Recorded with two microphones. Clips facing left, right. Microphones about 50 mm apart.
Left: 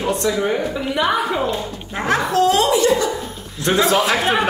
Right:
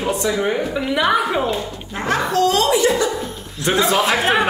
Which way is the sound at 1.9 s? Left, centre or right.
Centre.